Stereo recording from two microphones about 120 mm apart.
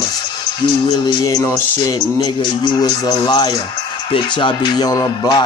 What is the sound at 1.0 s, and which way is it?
Music, 30° left (ahead or behind).